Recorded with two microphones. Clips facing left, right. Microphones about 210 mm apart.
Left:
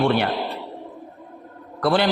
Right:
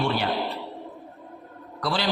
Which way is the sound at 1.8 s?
55° left (ahead or behind).